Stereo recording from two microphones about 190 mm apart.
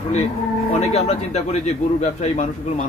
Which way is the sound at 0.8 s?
35° left (ahead or behind).